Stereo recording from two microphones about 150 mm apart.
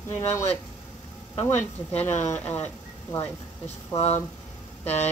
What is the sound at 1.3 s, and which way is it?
Speech, 45° left (ahead or behind).